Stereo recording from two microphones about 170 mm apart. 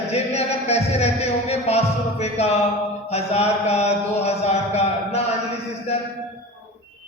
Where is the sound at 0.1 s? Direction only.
40° left (ahead or behind).